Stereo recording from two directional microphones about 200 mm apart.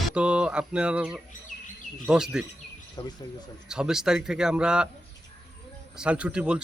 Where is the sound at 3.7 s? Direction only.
5° right (ahead or behind).